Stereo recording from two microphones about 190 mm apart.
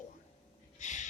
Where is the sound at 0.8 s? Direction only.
40° left (ahead or behind).